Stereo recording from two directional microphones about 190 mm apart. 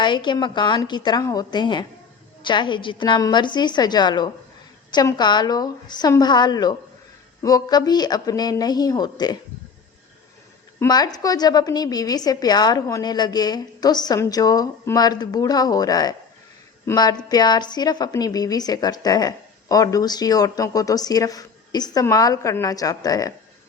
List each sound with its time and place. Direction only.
0.0 s a woman's voice: 25° left (ahead or behind)
10.8 s a woman's voice: 20° left (ahead or behind)